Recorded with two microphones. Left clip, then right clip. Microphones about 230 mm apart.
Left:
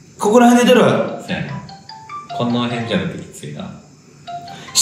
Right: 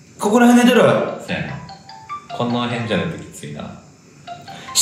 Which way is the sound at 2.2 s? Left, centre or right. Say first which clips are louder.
Left 1 dB; centre.